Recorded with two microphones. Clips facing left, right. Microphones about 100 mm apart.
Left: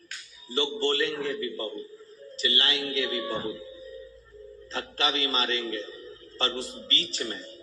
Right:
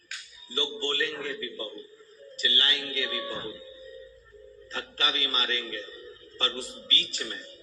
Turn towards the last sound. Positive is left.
turn(degrees=30)  # may be behind; listen again after turning